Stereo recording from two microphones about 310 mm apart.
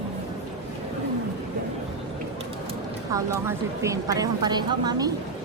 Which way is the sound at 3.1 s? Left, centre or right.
Centre.